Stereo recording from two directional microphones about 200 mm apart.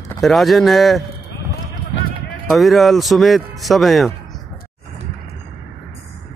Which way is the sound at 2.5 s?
Centre (ahead or behind).